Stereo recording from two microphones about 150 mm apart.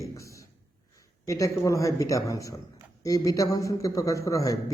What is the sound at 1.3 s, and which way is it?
A man's voice, 20° left (ahead or behind).